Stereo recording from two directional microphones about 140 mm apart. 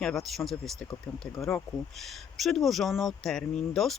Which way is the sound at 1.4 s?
20° left (ahead or behind).